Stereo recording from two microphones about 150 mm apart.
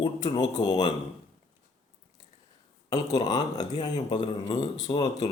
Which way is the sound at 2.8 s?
25° left (ahead or behind).